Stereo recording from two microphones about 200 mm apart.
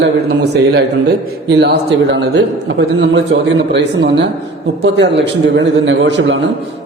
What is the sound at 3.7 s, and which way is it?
A man's voice, 60° right (ahead or behind).